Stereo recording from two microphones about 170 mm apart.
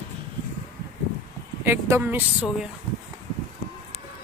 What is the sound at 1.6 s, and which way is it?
Speech, 15° right (ahead or behind).